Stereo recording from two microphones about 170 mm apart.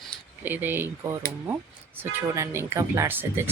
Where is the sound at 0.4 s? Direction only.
10° right (ahead or behind).